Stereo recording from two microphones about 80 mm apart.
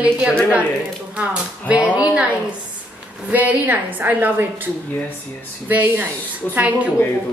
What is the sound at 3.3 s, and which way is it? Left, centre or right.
A woman's voice, right.